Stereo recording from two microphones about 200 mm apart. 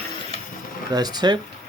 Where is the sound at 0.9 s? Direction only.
20° right (ahead or behind).